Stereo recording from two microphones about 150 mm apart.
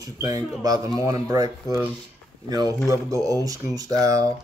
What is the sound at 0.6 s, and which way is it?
Speech, 25° right (ahead or behind).